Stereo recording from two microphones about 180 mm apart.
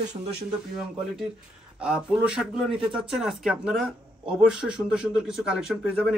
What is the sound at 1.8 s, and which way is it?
Speech, 5° right (ahead or behind).